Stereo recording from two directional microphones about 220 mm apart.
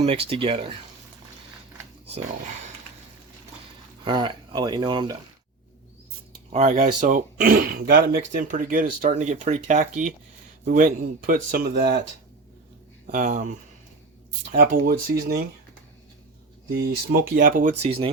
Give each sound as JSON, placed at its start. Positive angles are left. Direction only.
{"t": 0.0, "sound": "speech", "side_deg": -25}
{"t": 4.0, "sound": "speech", "side_deg": -20}
{"t": 6.5, "sound": "speech", "side_deg": -30}
{"t": 13.1, "sound": "speech", "side_deg": -35}
{"t": 16.6, "sound": "speech", "side_deg": -45}